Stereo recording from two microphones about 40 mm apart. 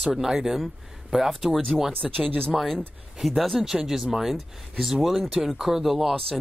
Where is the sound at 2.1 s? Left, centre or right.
Right.